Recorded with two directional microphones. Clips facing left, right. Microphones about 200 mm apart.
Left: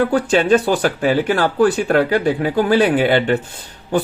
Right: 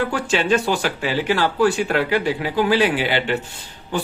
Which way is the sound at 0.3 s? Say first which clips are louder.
Left 4 dB; 50° left (ahead or behind).